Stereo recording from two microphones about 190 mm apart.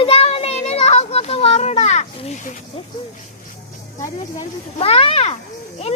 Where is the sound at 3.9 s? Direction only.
15° left (ahead or behind).